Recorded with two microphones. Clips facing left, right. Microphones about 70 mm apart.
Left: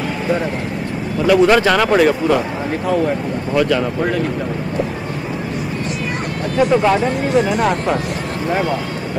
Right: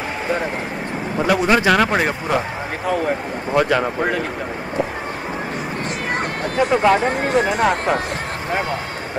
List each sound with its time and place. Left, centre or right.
1.2 s speech: right
3.5 s speech: right
6.7 s speech: right
7.0 s speech: right